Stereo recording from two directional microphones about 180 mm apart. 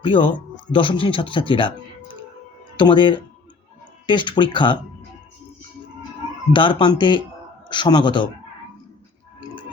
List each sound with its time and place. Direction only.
0.0 s speech: 30° left (ahead or behind)
2.7 s speech: 25° left (ahead or behind)
6.5 s speech: 25° left (ahead or behind)